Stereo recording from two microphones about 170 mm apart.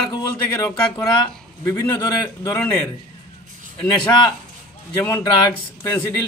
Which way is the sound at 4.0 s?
25° left (ahead or behind).